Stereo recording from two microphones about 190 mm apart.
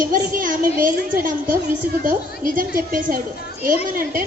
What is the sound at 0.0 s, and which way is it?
A child's voice, 45° right (ahead or behind).